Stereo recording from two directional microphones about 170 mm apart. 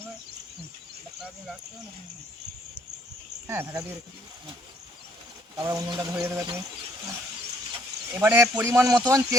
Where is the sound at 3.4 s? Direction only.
15° right (ahead or behind).